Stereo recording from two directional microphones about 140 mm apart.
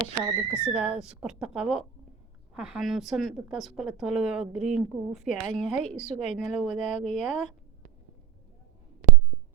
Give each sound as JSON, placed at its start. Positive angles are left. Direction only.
{"t": 0.2, "sound": "a woman's voice", "side_deg": -15}
{"t": 6.0, "sound": "a woman's voice", "side_deg": 60}
{"t": 6.3, "sound": "a woman's voice", "side_deg": 0}